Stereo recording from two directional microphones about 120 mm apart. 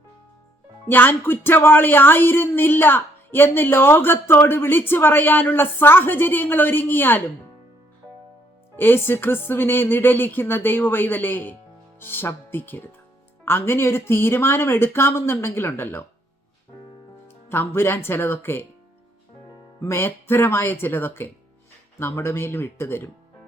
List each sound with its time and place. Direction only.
0.9 s speech: 15° left (ahead or behind)
8.7 s speech: 15° left (ahead or behind)
17.2 s speech: 20° left (ahead or behind)
19.8 s speech: 20° left (ahead or behind)